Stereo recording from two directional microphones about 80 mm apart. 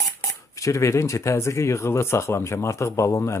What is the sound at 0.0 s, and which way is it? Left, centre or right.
Speech, left.